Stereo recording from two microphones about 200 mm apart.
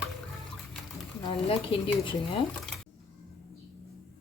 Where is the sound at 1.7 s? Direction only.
25° left (ahead or behind).